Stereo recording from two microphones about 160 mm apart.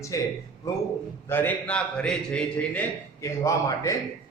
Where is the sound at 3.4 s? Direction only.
20° left (ahead or behind).